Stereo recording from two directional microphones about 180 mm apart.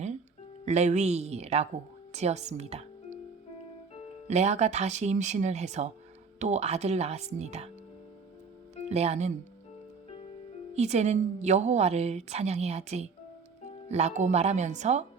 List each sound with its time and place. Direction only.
0.6 s a woman's voice: 40° right (ahead or behind)
4.3 s a woman's voice: 35° right (ahead or behind)
8.9 s a woman's voice: 35° right (ahead or behind)
10.8 s a woman's voice: 40° right (ahead or behind)